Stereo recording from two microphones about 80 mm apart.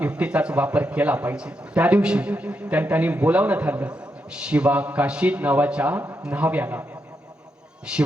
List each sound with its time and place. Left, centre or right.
0.0 s a man's voice: centre